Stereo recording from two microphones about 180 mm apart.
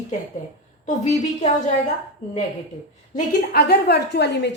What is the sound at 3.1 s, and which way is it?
A woman's voice, 60° left (ahead or behind).